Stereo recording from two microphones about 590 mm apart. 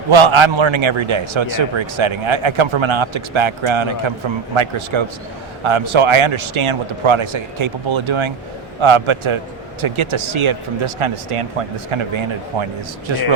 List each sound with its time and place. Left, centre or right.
0.1 s a man's voice: right